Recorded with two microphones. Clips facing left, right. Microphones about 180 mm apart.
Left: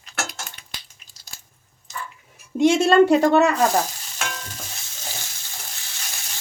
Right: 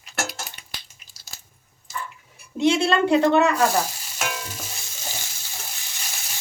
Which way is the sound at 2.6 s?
45° left (ahead or behind).